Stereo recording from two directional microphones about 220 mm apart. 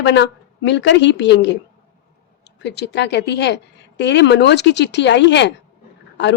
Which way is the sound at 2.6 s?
50° left (ahead or behind).